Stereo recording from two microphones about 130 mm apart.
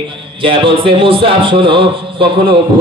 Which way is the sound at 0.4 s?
40° right (ahead or behind).